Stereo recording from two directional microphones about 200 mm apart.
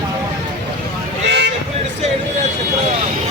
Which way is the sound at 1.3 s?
60° right (ahead or behind).